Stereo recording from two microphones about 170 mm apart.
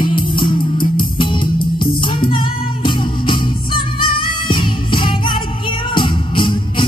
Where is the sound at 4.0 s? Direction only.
30° left (ahead or behind).